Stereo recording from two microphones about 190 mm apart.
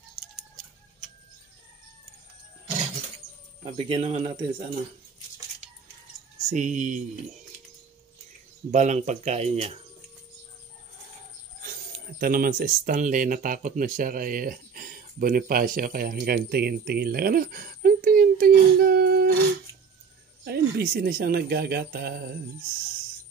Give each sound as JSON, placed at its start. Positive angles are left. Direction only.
{"t": 3.6, "sound": "speech", "side_deg": -35}
{"t": 6.5, "sound": "speech", "side_deg": -40}
{"t": 8.7, "sound": "speech", "side_deg": -40}
{"t": 12.2, "sound": "speech", "side_deg": -50}
{"t": 20.4, "sound": "speech", "side_deg": -60}